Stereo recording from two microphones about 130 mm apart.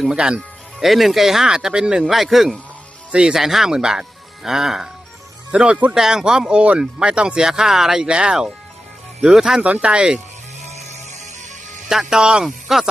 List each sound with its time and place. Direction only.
0.0 s speech: 5° right (ahead or behind)
10.6 s music: 60° right (ahead or behind)
12.1 s speech: 5° right (ahead or behind)